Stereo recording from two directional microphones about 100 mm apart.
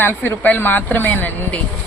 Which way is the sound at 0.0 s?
20° left (ahead or behind).